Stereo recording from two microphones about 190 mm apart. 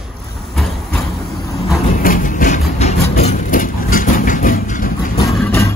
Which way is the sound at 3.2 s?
40° left (ahead or behind).